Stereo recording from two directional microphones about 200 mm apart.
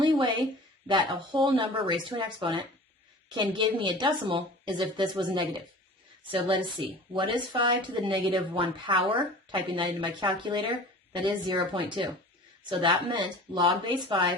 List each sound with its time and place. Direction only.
0.9 s a woman's voice: 25° right (ahead or behind)